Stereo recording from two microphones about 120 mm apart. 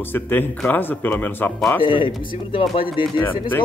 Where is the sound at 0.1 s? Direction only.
15° left (ahead or behind).